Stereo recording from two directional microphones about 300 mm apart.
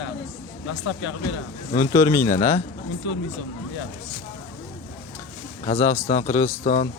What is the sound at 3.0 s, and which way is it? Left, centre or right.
Speech, left.